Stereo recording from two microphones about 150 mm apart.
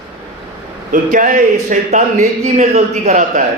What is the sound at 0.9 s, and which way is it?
A man's voice, 60° right (ahead or behind).